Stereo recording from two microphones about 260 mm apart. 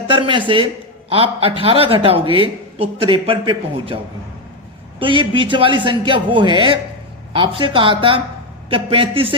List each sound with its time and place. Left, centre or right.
0.1 s a woman's voice: centre
4.9 s speech: centre